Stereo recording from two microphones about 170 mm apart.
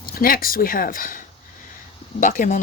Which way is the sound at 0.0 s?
60° left (ahead or behind).